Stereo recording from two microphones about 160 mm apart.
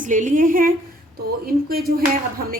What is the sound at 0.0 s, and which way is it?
Speech, 55° right (ahead or behind).